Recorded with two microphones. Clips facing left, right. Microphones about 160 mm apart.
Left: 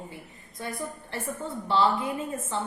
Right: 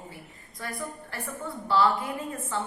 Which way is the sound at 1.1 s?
20° left (ahead or behind).